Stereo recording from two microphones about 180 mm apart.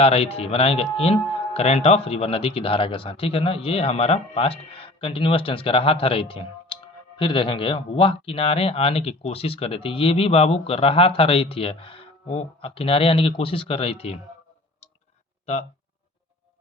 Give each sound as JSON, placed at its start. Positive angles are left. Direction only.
{"t": 0.0, "sound": "speech", "side_deg": 35}